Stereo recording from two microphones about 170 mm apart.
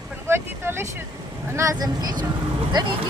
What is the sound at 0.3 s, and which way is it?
Vehicle, 15° right (ahead or behind).